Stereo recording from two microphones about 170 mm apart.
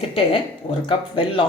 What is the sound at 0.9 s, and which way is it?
Speech, 30° left (ahead or behind).